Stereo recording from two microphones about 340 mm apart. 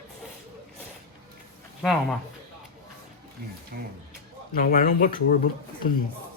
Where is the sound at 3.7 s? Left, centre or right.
Right.